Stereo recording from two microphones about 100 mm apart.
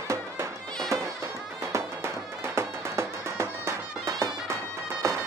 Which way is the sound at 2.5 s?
25° right (ahead or behind).